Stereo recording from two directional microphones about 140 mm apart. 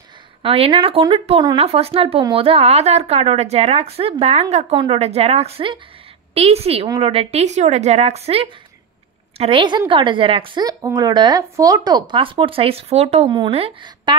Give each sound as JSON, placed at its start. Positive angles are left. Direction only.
{"t": 0.4, "sound": "a woman's voice", "side_deg": -40}